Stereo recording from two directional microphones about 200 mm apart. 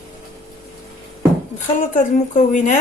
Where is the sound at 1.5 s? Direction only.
40° left (ahead or behind).